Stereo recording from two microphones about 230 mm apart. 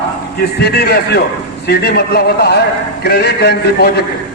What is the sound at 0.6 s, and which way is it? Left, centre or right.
A man's voice, left.